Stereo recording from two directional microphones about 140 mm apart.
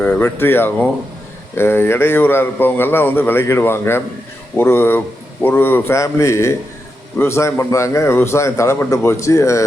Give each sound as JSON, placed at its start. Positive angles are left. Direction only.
{"t": 0.0, "sound": "a man's voice", "side_deg": 10}